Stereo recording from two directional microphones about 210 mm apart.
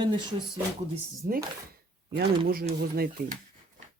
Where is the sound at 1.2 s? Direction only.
40° right (ahead or behind).